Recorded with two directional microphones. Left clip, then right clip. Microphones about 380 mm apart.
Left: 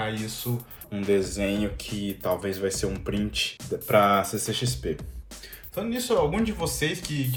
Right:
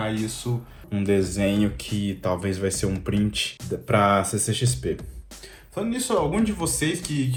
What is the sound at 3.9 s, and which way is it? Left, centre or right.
Speech, right.